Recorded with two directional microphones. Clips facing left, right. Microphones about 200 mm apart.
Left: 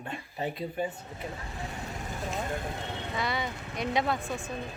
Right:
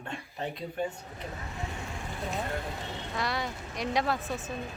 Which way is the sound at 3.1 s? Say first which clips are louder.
Even; centre (ahead or behind).